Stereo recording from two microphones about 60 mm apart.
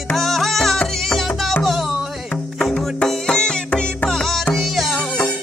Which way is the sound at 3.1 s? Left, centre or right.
Centre.